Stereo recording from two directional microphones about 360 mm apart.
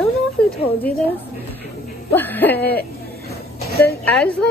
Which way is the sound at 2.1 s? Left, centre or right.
Centre.